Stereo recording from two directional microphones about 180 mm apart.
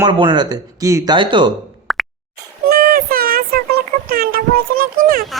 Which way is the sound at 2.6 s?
55° right (ahead or behind).